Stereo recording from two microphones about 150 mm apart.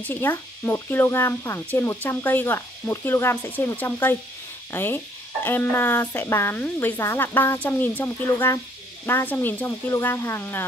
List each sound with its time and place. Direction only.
0.0 s speech: 15° left (ahead or behind)